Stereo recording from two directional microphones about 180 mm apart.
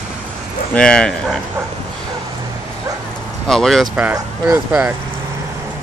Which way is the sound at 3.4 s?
Centre (ahead or behind).